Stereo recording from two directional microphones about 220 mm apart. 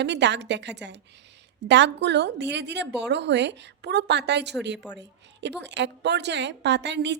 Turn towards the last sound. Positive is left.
turn(degrees=-50)  # may be behind; listen again after turning